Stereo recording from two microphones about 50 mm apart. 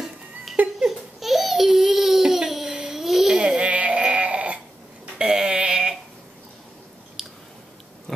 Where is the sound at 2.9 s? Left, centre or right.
Centre.